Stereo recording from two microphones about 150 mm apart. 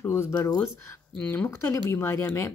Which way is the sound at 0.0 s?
15° left (ahead or behind).